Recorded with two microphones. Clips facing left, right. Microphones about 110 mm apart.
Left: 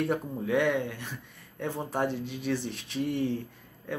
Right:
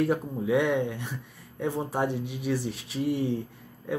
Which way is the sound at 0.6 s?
15° right (ahead or behind).